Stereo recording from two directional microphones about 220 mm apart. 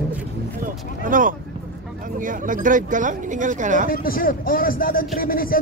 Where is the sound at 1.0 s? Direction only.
40° right (ahead or behind).